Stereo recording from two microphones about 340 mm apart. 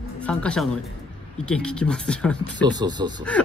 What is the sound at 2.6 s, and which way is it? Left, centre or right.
Speech, centre.